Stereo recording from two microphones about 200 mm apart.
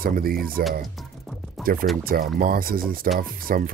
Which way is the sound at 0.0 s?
45° right (ahead or behind).